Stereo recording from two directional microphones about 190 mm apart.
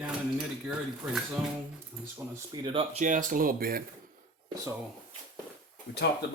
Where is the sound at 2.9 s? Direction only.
45° right (ahead or behind).